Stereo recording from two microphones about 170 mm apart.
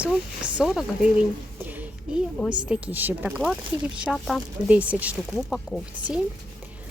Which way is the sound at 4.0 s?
5° left (ahead or behind).